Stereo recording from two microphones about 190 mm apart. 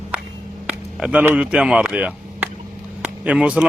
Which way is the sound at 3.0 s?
5° right (ahead or behind).